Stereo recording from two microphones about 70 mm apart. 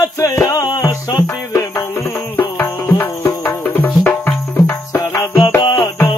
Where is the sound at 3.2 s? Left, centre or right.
Left.